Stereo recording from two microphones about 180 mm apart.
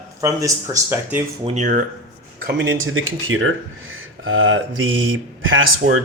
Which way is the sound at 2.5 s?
90° right.